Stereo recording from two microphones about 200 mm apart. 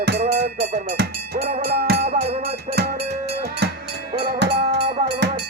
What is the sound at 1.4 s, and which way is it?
Cattle, 30° right (ahead or behind).